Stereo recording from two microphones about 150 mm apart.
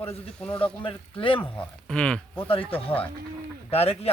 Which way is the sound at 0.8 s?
35° left (ahead or behind).